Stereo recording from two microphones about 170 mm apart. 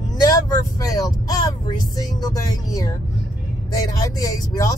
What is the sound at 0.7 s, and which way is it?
Speech, 20° left (ahead or behind).